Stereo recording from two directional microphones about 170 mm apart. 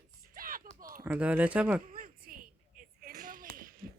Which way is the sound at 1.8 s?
55° right (ahead or behind).